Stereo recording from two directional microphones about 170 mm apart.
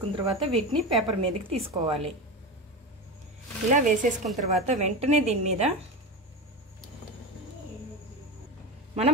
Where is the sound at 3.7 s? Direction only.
50° right (ahead or behind).